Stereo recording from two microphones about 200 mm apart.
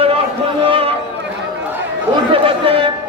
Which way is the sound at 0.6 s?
25° right (ahead or behind).